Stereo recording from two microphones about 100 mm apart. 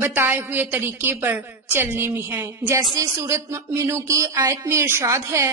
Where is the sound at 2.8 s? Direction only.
35° right (ahead or behind).